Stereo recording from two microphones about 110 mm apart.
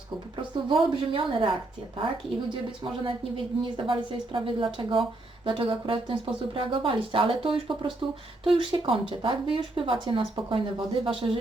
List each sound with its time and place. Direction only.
0.7 s speech: 50° right (ahead or behind)
2.5 s speech: 50° right (ahead or behind)